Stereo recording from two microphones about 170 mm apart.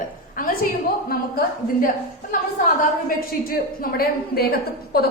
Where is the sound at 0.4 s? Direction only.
55° left (ahead or behind).